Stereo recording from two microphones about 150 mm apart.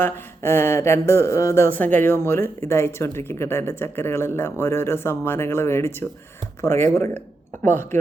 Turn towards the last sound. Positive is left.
turn(degrees=15)  # may be behind; listen again after turning